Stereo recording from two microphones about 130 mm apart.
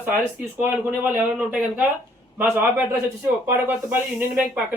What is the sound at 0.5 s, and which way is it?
Speech, 15° right (ahead or behind).